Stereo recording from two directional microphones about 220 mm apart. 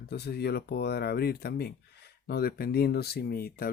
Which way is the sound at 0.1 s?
45° left (ahead or behind).